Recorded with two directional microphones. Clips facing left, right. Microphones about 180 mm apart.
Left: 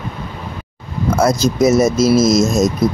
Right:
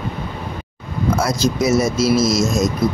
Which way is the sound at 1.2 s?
45° left (ahead or behind).